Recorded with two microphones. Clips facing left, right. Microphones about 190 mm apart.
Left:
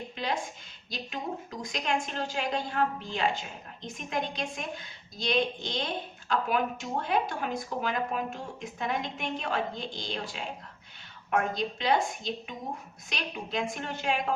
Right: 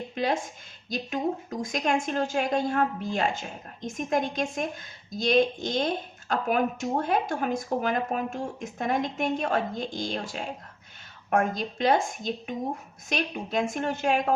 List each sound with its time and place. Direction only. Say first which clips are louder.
0.1 s a woman's voice: right 6 dB; 45° right (ahead or behind)